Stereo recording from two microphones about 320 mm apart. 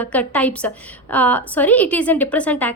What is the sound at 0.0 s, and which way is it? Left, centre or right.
A woman's voice, centre.